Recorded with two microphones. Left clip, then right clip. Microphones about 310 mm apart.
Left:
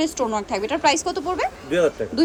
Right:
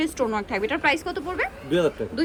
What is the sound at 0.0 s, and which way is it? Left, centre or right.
A woman's voice, centre.